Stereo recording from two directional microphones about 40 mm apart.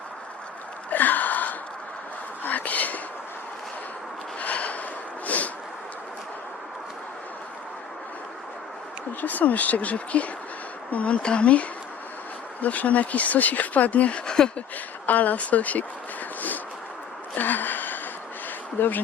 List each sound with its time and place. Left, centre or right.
0.9 s a sound: left
4.4 s snort: left
5.2 s a sound: left
9.2 s speech: left
12.6 s speech: left
14.3 s speech: left
15.0 s speech: left
17.3 s a sound: left
18.8 s speech: left